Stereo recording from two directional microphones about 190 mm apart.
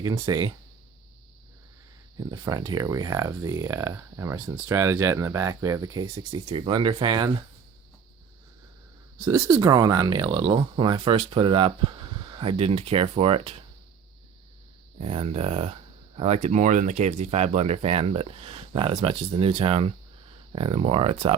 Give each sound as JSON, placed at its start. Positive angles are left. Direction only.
{"t": 0.0, "sound": "speech", "side_deg": -20}
{"t": 2.1, "sound": "speech", "side_deg": -25}
{"t": 9.2, "sound": "speech", "side_deg": -20}
{"t": 14.9, "sound": "speech", "side_deg": -30}